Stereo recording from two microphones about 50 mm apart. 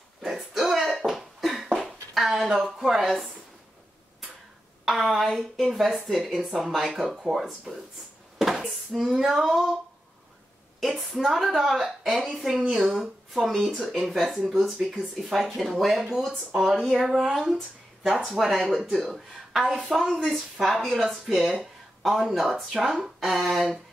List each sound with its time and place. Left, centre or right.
0.2 s beatboxing: centre
4.8 s a woman's voice: centre
8.4 s a sound: centre
10.8 s speech: centre